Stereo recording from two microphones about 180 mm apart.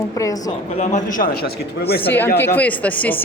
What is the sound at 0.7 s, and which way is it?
Speech, 40° left (ahead or behind).